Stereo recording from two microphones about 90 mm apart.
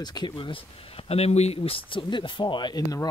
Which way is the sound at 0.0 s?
55° left (ahead or behind).